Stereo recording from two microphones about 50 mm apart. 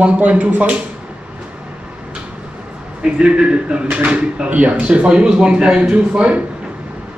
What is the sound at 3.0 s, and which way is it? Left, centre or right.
A man's voice, centre.